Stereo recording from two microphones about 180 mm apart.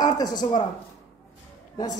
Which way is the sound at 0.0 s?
20° left (ahead or behind).